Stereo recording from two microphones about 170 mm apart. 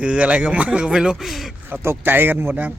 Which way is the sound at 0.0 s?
5° right (ahead or behind).